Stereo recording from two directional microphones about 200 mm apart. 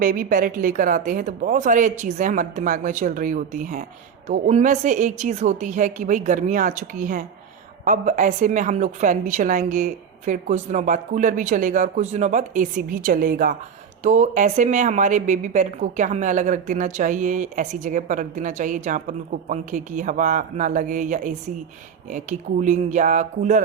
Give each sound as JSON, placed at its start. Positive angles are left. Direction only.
{"t": 0.0, "sound": "a woman's voice", "side_deg": -45}